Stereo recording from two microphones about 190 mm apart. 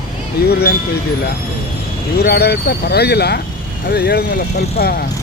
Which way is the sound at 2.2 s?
55° left (ahead or behind).